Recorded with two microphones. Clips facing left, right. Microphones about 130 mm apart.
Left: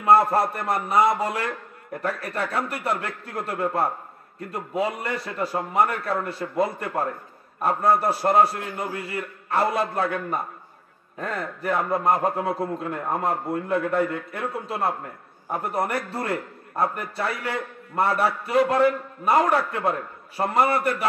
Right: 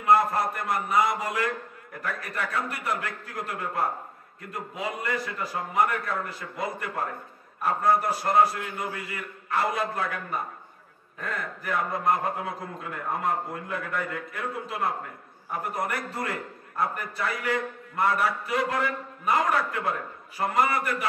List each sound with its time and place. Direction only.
0.0 s a man's voice: 30° left (ahead or behind)